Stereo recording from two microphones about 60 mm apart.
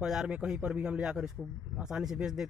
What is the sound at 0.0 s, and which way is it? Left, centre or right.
Speech, centre.